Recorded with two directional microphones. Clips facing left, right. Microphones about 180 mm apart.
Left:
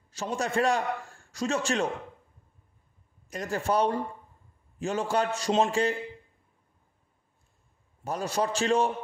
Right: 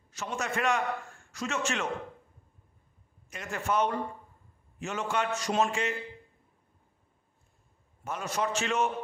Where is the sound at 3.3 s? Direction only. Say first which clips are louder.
Left 4 dB; 35° left (ahead or behind).